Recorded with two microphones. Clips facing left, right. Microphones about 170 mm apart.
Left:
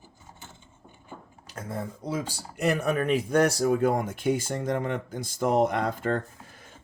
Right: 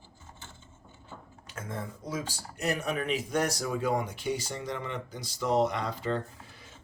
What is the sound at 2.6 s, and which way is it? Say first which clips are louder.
Speech: left 6 dB; 55° left (ahead or behind).